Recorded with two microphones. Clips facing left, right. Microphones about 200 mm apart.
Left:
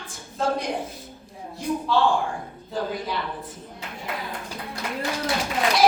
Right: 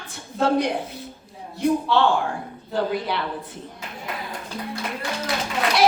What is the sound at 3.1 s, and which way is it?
Speech, 65° right (ahead or behind).